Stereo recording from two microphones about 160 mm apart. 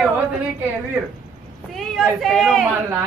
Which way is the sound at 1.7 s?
Centre (ahead or behind).